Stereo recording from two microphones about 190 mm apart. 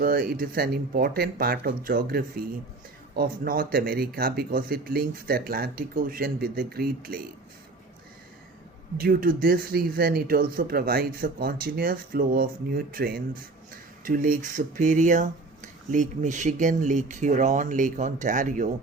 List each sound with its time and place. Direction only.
0.0 s speech: 50° right (ahead or behind)
9.0 s speech: 50° right (ahead or behind)